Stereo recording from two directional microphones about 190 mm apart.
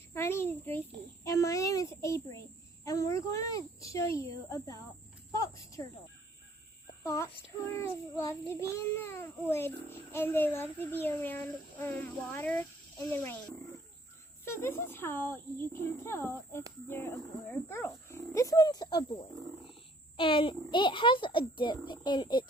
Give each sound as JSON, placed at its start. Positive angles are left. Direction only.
{"t": 0.1, "sound": "a child's voice", "side_deg": 10}
{"t": 1.2, "sound": "child singing", "side_deg": 15}
{"t": 5.4, "sound": "speech", "side_deg": 15}
{"t": 7.0, "sound": "child singing", "side_deg": 15}
{"t": 14.4, "sound": "child singing", "side_deg": 15}
{"t": 20.1, "sound": "a child's voice", "side_deg": 25}